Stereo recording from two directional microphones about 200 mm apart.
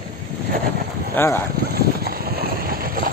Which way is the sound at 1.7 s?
50° right (ahead or behind).